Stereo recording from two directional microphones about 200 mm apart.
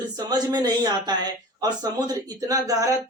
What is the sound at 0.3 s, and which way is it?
Speech, 20° right (ahead or behind).